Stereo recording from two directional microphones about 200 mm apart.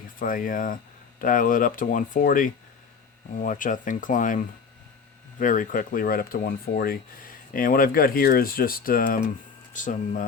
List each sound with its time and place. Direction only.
0.2 s speech: 45° left (ahead or behind)
5.4 s speech: 40° left (ahead or behind)